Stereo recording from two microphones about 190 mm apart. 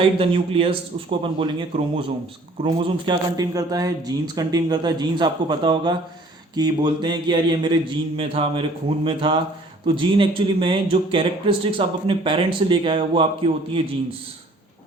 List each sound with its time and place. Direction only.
0.2 s speech: 30° right (ahead or behind)